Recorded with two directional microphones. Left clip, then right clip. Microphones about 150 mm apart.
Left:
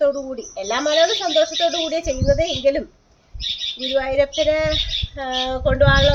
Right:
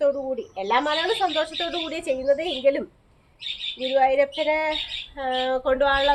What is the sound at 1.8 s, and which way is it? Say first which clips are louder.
Speech: left 3 dB; 20° right (ahead or behind).